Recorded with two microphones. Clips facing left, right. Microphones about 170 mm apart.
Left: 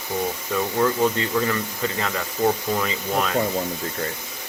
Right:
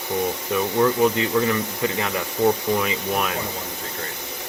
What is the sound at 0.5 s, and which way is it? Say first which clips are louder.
Speech: right 2 dB; 15° right (ahead or behind).